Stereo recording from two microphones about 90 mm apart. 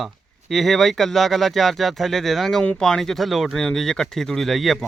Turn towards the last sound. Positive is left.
turn(degrees=0)  # may be behind; listen again after turning